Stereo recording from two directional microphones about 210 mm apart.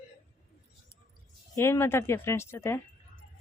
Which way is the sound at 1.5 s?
10° left (ahead or behind).